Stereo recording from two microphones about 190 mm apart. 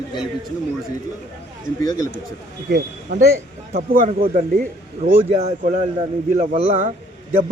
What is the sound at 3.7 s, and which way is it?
Speech, 45° right (ahead or behind).